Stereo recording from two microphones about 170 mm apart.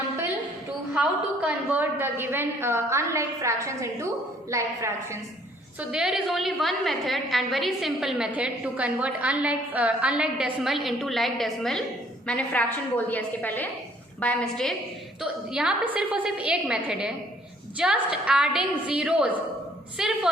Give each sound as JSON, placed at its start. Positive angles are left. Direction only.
{"t": 0.9, "sound": "a woman's voice", "side_deg": -5}
{"t": 5.9, "sound": "a woman's voice", "side_deg": -5}
{"t": 15.2, "sound": "a woman's voice", "side_deg": -5}